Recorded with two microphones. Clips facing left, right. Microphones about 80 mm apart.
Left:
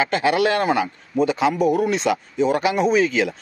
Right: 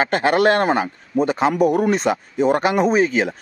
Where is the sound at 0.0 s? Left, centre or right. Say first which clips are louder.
Right 2 dB; right.